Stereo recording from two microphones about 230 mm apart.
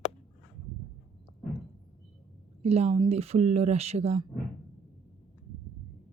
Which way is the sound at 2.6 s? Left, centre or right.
Right.